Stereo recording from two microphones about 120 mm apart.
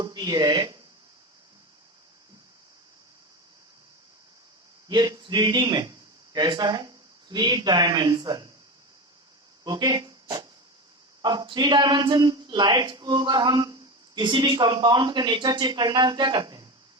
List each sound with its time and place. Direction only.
0.0 s speech: 35° right (ahead or behind)
4.9 s a man's voice: 35° right (ahead or behind)
9.6 s speech: 35° right (ahead or behind)